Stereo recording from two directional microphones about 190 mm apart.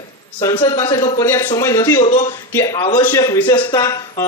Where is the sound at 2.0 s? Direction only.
35° left (ahead or behind).